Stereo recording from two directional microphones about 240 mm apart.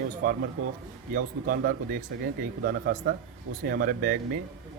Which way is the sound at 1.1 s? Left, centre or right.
Right.